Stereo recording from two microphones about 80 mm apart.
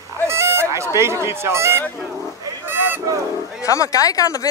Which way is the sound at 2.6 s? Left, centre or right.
Right.